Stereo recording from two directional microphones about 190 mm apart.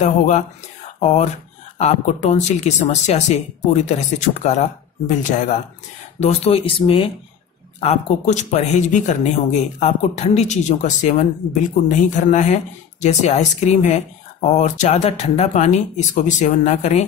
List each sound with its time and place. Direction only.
0.9 s speech: 35° left (ahead or behind)